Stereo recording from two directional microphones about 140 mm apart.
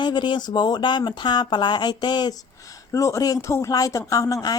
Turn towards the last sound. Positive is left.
turn(degrees=25)  # may be behind; listen again after turning